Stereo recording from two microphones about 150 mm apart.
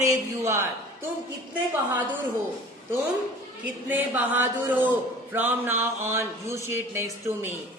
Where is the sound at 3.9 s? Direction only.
10° right (ahead or behind).